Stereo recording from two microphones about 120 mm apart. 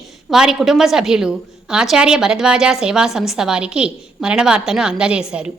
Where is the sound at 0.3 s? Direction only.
5° right (ahead or behind).